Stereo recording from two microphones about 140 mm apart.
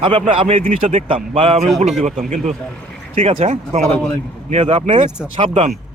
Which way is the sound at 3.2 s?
40° right (ahead or behind).